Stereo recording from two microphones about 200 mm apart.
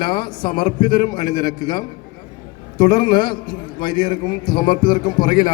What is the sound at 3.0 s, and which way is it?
Speech, 45° left (ahead or behind).